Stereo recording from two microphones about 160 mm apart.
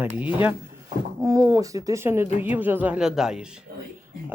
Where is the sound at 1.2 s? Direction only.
20° right (ahead or behind); by 3.5 s 5° right (ahead or behind).